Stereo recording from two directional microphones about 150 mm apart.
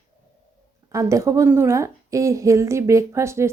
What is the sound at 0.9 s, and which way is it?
A woman's voice, 20° right (ahead or behind).